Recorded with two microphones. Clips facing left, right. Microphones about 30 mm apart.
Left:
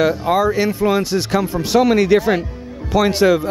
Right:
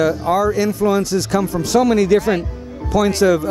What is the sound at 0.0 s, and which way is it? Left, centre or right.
Speech, left.